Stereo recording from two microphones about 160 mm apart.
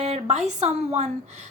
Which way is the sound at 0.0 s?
45° right (ahead or behind).